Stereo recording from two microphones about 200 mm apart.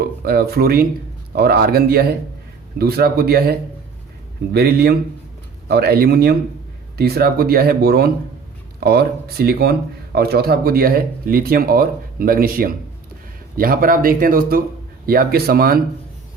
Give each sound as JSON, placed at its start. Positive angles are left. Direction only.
{"t": 0.0, "sound": "speech", "side_deg": -50}